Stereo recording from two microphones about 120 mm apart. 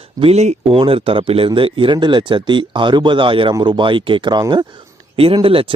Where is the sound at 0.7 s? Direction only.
50° right (ahead or behind).